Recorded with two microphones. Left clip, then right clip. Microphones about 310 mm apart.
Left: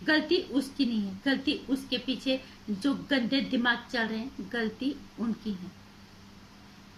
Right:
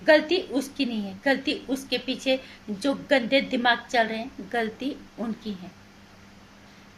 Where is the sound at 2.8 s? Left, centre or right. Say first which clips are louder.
Right 6 dB; right.